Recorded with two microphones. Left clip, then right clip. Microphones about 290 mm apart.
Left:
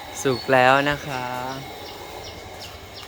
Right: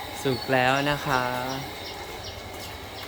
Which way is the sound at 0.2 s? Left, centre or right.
Centre.